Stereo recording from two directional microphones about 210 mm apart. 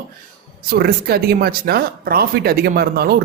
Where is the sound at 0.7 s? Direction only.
50° right (ahead or behind).